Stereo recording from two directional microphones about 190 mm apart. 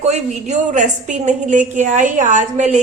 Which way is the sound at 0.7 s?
40° right (ahead or behind).